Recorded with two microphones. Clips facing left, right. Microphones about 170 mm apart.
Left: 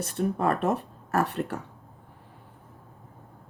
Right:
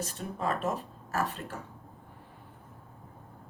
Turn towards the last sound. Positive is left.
turn(degrees=65)  # may be behind; listen again after turning